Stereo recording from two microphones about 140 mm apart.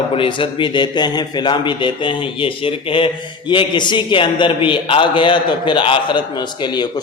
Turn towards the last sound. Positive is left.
turn(degrees=35)  # may be behind; listen again after turning